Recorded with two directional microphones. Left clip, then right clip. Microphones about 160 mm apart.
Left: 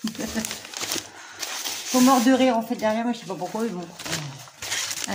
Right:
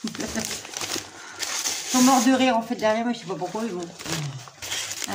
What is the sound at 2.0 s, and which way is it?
Speech, 10° left (ahead or behind).